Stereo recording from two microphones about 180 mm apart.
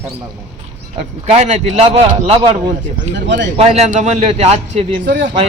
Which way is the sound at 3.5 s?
35° right (ahead or behind).